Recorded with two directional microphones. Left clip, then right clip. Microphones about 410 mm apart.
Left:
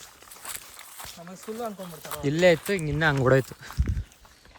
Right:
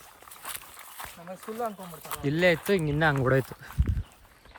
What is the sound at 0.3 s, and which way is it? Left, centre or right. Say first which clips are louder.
Speech: even; centre.